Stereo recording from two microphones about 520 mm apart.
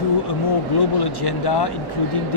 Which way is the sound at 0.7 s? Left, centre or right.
Left.